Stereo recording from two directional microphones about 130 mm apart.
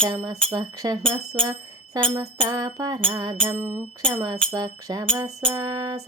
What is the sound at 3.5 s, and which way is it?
Music, 20° right (ahead or behind).